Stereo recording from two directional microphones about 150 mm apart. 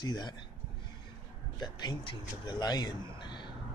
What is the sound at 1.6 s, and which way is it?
Speech, 30° left (ahead or behind).